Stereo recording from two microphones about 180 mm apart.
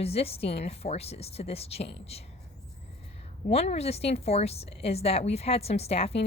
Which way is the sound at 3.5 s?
35° left (ahead or behind).